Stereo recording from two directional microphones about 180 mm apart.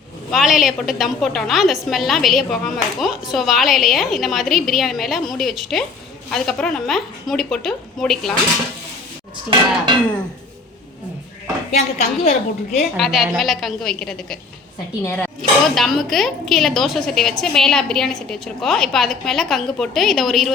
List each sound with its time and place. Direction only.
0.3 s a woman's voice: centre (ahead or behind)
9.3 s music: 25° right (ahead or behind)
12.2 s a woman's voice: 40° left (ahead or behind)
13.0 s a woman's voice: centre (ahead or behind)